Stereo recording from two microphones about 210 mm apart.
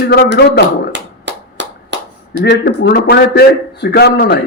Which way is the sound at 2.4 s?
55° left (ahead or behind).